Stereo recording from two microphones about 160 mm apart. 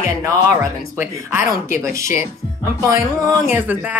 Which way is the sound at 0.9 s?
15° right (ahead or behind).